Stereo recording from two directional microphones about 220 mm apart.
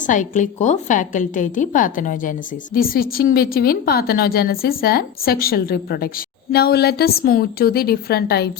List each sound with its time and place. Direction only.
0.0 s a woman's voice: 35° left (ahead or behind)